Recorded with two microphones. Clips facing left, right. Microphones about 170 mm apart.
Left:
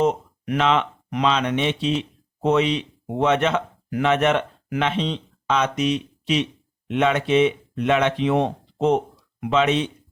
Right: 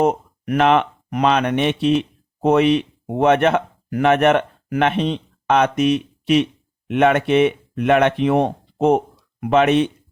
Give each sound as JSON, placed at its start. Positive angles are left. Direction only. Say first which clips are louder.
{"t": 0.0, "sound": "speech", "louder": "right 3 dB", "side_deg": -55}